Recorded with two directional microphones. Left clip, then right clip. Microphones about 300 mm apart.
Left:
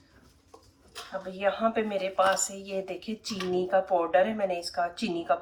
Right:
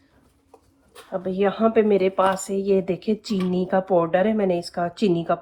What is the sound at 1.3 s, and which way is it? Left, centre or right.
A woman's voice, right.